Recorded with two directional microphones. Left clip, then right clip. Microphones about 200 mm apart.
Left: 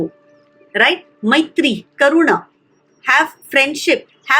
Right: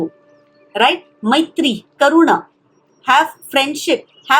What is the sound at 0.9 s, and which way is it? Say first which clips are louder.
Speech: even; 45° left (ahead or behind).